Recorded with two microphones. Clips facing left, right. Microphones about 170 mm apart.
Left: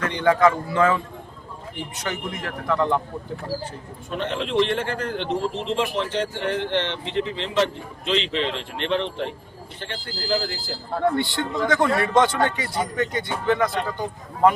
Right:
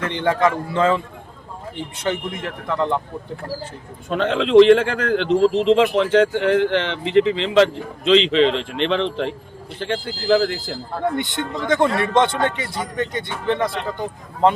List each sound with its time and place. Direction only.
0.0 s speech: 25° right (ahead or behind)
2.0 s speech: 25° right (ahead or behind)
4.1 s speech: 90° right
11.2 s speech: 20° right (ahead or behind)